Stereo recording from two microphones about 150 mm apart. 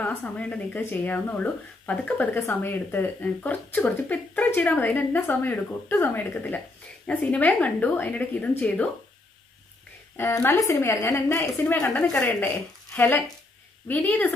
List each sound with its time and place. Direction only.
0.0 s speech: 10° left (ahead or behind)
10.1 s speech: 15° left (ahead or behind)